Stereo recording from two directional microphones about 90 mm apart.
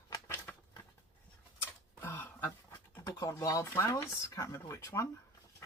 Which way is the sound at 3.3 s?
35° left (ahead or behind).